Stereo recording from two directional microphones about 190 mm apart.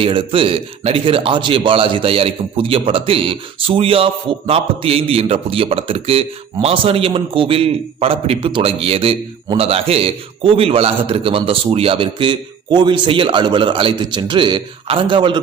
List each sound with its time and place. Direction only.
0.0 s a man's voice: 25° right (ahead or behind)